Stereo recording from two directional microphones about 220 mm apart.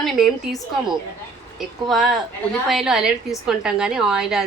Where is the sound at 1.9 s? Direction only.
Centre (ahead or behind).